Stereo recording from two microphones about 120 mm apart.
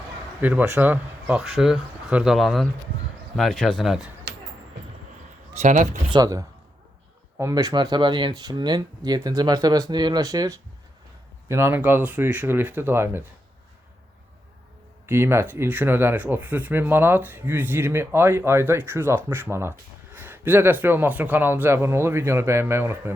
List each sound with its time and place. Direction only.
0.4 s speech: 15° right (ahead or behind)
1.4 s speech: centre (ahead or behind)
5.5 s speech: 90° right
6.1 s speech: 30° right (ahead or behind)
7.5 s speech: 35° right (ahead or behind); by 13.2 s 20° right (ahead or behind)
15.0 s speech: 20° right (ahead or behind)